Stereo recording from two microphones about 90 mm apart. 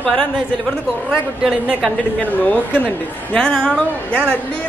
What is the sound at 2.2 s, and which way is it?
A woman's voice, 15° left (ahead or behind).